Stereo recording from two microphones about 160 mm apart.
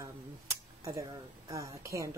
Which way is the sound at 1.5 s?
20° right (ahead or behind).